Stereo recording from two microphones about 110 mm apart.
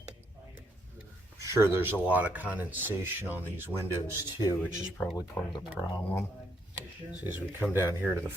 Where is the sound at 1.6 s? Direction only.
20° right (ahead or behind).